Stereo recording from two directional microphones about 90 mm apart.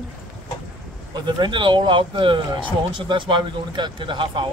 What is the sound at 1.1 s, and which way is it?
Speech, 55° right (ahead or behind).